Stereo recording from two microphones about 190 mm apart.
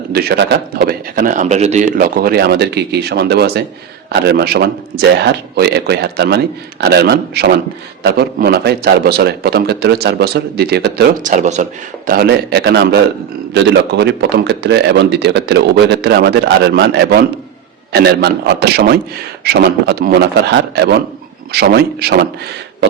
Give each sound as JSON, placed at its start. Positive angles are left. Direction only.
{"t": 0.1, "sound": "speech", "side_deg": -55}
{"t": 12.0, "sound": "speech", "side_deg": -50}